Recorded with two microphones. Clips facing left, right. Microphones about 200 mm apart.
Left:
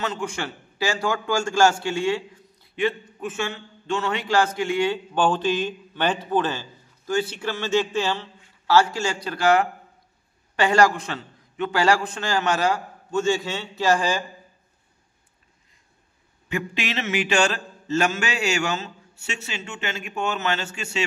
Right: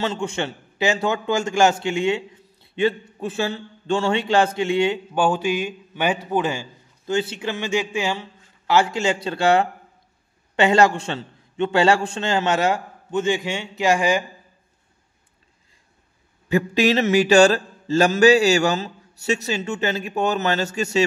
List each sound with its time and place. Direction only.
0.0 s a man's voice: 25° right (ahead or behind)
5.1 s a man's voice: 10° right (ahead or behind)
16.4 s mantra: 40° right (ahead or behind)